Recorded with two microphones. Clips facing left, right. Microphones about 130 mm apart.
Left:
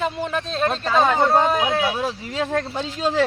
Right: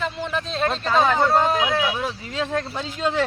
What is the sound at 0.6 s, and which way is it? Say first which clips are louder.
Speech: left 1 dB; 5° left (ahead or behind).